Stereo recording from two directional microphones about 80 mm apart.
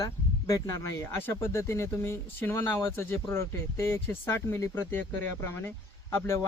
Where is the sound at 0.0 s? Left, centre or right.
Left.